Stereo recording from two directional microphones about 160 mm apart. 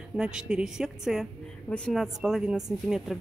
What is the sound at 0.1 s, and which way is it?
Speech, 5° right (ahead or behind).